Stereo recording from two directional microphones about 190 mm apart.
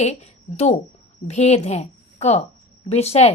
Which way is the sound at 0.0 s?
35° left (ahead or behind).